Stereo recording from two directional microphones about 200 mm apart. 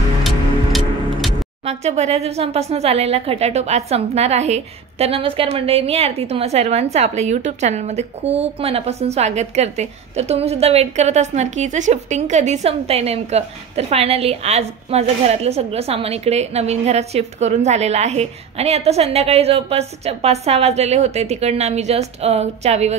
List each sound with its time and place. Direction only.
0.2 s music: centre (ahead or behind)
1.7 s speech: 30° right (ahead or behind)